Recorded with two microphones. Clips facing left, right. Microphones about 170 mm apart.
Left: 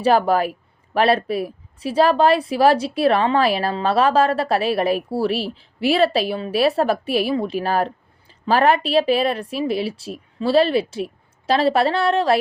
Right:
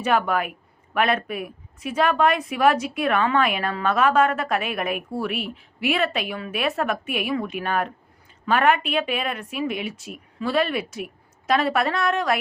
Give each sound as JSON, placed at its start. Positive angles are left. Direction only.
{"t": 0.0, "sound": "a woman's voice", "side_deg": 35}